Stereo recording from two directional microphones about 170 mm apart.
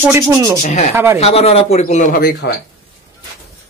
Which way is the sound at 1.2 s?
35° left (ahead or behind).